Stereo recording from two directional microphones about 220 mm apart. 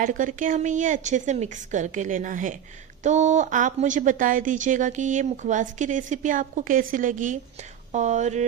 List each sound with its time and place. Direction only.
0.0 s a woman's voice: 35° right (ahead or behind)